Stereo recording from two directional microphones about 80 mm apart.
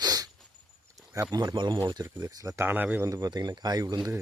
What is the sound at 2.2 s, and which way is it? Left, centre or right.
Speech, right.